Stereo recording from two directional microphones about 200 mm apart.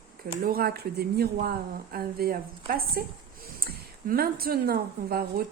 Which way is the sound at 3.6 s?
50° right (ahead or behind).